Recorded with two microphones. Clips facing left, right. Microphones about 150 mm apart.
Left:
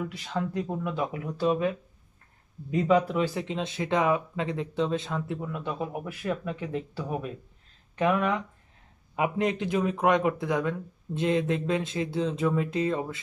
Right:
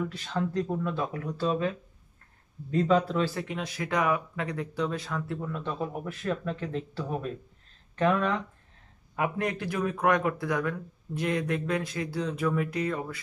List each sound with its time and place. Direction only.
0.1 s speech: 15° left (ahead or behind)
2.7 s speech: 15° left (ahead or behind)
5.4 s speech: 10° left (ahead or behind)